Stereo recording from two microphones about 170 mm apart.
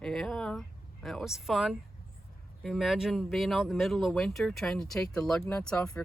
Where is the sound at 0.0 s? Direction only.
5° left (ahead or behind).